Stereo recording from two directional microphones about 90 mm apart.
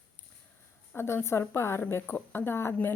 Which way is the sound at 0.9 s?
25° left (ahead or behind).